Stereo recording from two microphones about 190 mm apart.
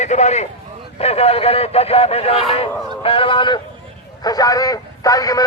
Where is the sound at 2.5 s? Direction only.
30° left (ahead or behind).